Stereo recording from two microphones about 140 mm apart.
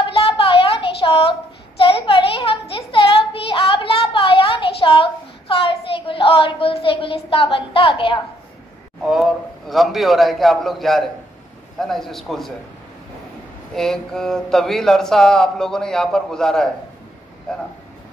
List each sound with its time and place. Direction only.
0.1 s a sound: 40° left (ahead or behind)
9.0 s speech: centre (ahead or behind)
13.7 s speech: 5° left (ahead or behind)